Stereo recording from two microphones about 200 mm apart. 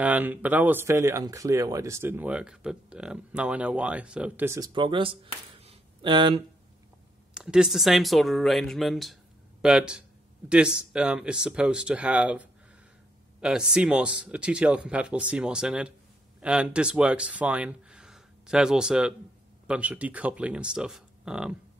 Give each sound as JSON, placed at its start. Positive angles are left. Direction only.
{"t": 0.0, "sound": "speech", "side_deg": -10}
{"t": 4.6, "sound": "speech", "side_deg": -25}
{"t": 7.3, "sound": "speech", "side_deg": -5}